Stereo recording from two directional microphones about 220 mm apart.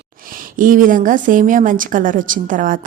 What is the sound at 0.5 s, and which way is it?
A woman's voice, 35° right (ahead or behind).